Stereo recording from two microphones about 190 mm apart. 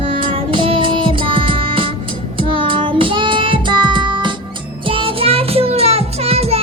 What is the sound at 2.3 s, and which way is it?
Child singing, 25° right (ahead or behind).